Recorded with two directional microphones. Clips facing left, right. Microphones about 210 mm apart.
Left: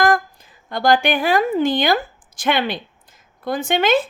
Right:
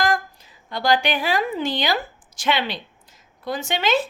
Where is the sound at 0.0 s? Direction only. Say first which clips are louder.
Left 5 dB; 50° left (ahead or behind).